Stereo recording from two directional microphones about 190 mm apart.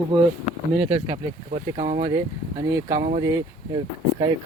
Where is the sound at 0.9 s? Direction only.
30° right (ahead or behind).